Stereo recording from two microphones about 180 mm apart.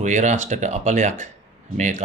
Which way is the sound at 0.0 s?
45° right (ahead or behind).